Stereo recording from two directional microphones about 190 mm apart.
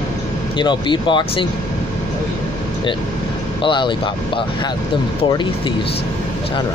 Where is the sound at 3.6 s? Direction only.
25° left (ahead or behind).